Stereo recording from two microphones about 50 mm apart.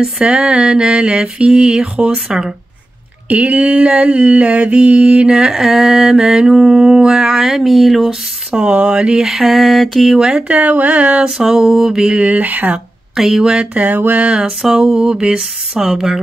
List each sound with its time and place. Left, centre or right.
0.0 s mantra: centre
3.3 s mantra: right; by 8.2 s centre
8.5 s mantra: centre
10.1 s mantra: centre
10.5 s mantra: right
11.2 s mantra: centre
12.2 s mantra: right
13.1 s speech: centre
13.4 s mantra: centre
13.8 s a sound: right
14.3 s mantra: centre